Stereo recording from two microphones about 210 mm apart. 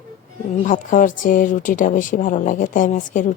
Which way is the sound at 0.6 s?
35° left (ahead or behind).